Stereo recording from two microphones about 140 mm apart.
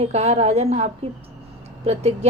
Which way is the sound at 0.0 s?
50° right (ahead or behind).